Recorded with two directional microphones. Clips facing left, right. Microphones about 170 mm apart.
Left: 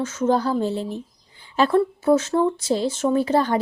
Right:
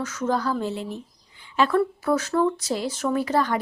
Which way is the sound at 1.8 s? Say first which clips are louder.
Left 4 dB; 25° left (ahead or behind).